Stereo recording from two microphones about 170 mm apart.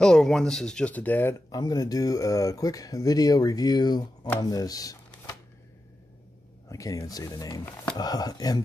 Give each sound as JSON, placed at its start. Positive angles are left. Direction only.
{"t": 0.0, "sound": "speech", "side_deg": 5}
{"t": 1.5, "sound": "speech", "side_deg": 20}
{"t": 6.7, "sound": "speech", "side_deg": 20}